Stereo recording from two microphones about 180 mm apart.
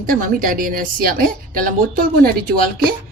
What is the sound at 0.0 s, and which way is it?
A woman's voice, 50° right (ahead or behind).